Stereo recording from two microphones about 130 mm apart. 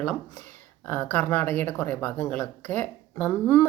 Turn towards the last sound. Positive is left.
turn(degrees=15)  # may be behind; listen again after turning